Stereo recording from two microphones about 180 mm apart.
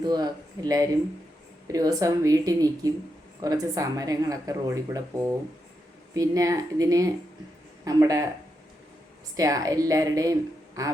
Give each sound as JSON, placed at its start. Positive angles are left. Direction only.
{"t": 0.0, "sound": "speech", "side_deg": -20}
{"t": 9.3, "sound": "speech", "side_deg": -20}